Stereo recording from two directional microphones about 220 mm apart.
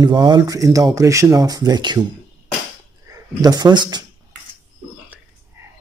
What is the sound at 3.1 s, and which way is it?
Speech, 20° right (ahead or behind).